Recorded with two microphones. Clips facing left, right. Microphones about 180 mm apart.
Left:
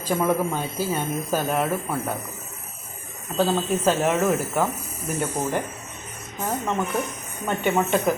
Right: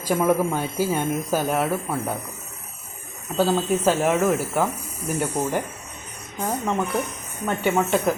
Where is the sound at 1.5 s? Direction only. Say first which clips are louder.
Right 1 dB; centre (ahead or behind).